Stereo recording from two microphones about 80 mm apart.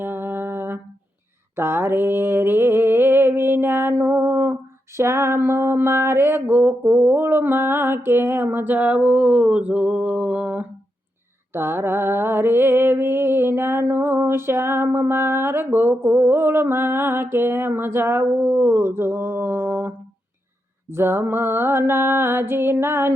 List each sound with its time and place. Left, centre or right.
0.0 s a sound: right
1.5 s music: right
11.5 s music: right
20.9 s music: right